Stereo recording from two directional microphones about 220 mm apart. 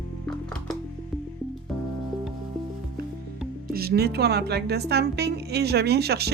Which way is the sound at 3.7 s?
45° right (ahead or behind).